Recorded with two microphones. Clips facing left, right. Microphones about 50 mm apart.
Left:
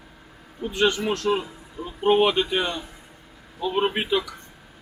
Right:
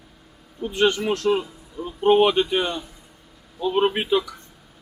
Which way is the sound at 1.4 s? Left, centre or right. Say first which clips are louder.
Right 2 dB; left.